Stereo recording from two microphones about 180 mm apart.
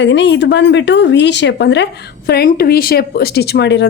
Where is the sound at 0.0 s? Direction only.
80° left.